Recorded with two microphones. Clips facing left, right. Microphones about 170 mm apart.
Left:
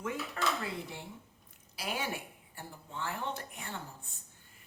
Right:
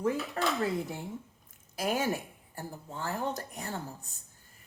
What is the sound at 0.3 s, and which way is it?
Speech, 45° right (ahead or behind).